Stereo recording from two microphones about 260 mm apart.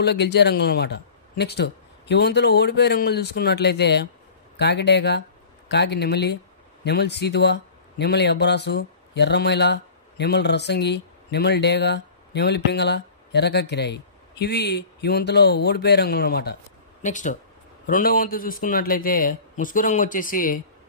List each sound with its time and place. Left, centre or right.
0.0 s a man's voice: left